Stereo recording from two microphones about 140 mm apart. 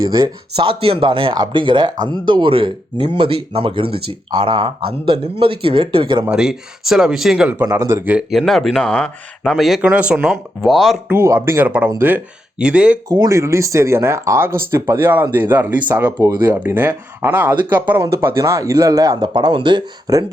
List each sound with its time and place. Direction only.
0.5 s speech: 40° right (ahead or behind)
6.2 s speech: 5° right (ahead or behind)
7.6 s speech: 20° right (ahead or behind)
8.3 s speech: centre (ahead or behind)
11.1 s speech: 15° right (ahead or behind)
13.1 s speech: 25° right (ahead or behind)
19.3 s speech: 35° right (ahead or behind)